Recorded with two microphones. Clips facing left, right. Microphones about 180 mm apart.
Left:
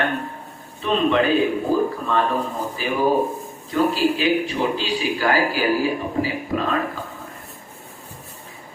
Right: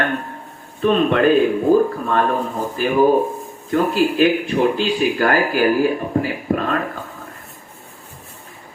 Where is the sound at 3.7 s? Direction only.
55° right (ahead or behind).